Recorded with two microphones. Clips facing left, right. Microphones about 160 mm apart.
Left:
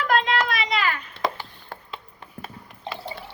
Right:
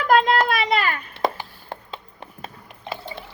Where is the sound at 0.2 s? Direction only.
50° right (ahead or behind).